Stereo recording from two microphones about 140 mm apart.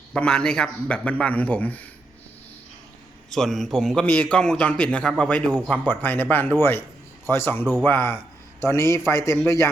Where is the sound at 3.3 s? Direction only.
Centre (ahead or behind).